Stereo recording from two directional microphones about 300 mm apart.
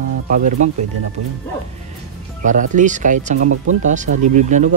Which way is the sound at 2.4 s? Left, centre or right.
Right.